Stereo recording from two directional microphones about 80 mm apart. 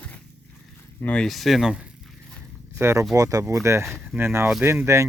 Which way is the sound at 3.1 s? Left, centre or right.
Right.